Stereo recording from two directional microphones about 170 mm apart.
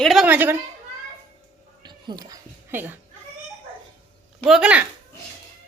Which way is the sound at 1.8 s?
25° right (ahead or behind).